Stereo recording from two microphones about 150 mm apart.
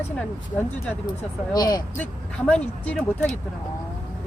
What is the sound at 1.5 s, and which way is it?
Speech, 25° left (ahead or behind).